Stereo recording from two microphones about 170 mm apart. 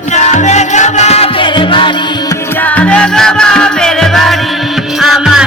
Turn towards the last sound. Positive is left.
turn(degrees=0)  # may be behind; listen again after turning